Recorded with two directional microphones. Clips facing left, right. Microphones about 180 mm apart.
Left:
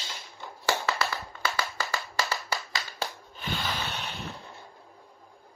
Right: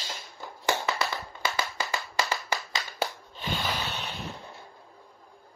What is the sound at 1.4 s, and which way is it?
Clapping, 15° right (ahead or behind).